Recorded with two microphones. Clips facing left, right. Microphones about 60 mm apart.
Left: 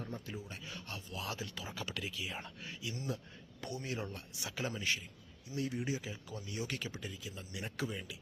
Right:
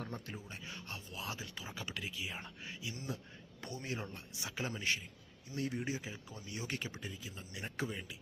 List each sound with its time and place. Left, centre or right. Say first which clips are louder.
0.5 s speech: left 1 dB; right